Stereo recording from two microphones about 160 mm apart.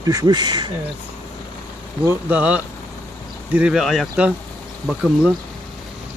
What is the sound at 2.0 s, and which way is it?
Speech, 10° right (ahead or behind).